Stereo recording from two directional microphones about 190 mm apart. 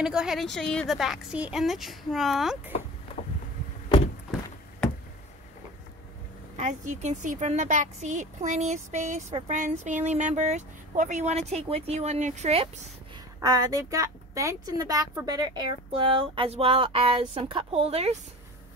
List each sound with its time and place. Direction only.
0.0 s a woman's voice: 5° right (ahead or behind)
6.5 s a woman's voice: 40° right (ahead or behind)
13.4 s a woman's voice: 20° right (ahead or behind)